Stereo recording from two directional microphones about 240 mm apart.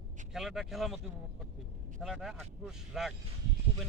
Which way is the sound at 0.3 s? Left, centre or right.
Centre.